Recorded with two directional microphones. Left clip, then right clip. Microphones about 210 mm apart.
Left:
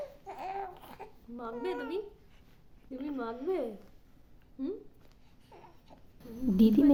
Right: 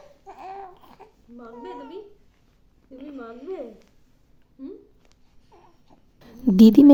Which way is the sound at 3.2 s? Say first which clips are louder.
Left 1 dB; 55° left (ahead or behind).